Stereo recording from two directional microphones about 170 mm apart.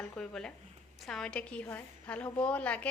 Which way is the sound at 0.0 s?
5° left (ahead or behind).